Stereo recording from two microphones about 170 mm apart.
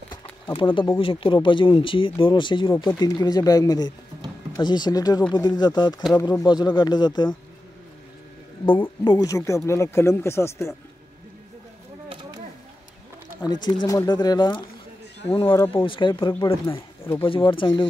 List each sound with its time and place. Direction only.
0.1 s a sound: 30° left (ahead or behind)
0.9 s speech: 30° left (ahead or behind)
9.0 s speech: 20° left (ahead or behind)
13.5 s speech: 25° left (ahead or behind)
17.0 s speech: 15° left (ahead or behind)
17.3 s speech: 30° left (ahead or behind)